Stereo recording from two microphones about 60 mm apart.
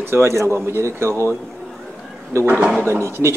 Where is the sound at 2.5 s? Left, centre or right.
Right.